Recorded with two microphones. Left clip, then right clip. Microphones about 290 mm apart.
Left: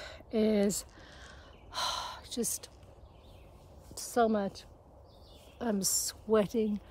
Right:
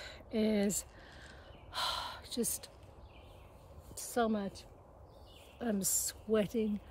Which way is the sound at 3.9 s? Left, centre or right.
Centre.